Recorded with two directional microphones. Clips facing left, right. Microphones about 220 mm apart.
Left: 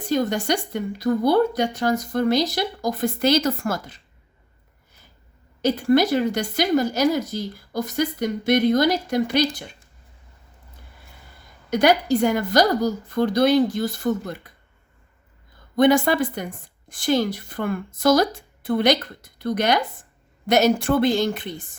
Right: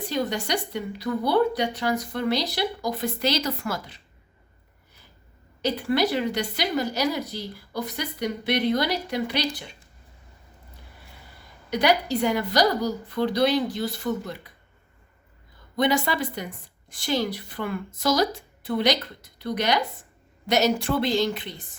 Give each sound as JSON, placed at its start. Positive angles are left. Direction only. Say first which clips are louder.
{"t": 0.1, "sound": "a woman's voice", "louder": "left 6 dB", "side_deg": 45}
{"t": 5.6, "sound": "a woman's voice", "louder": "left 5 dB", "side_deg": 45}
{"t": 11.7, "sound": "a woman's voice", "louder": "left 4 dB", "side_deg": 45}
{"t": 15.7, "sound": "a woman's voice", "louder": "left 7 dB", "side_deg": 50}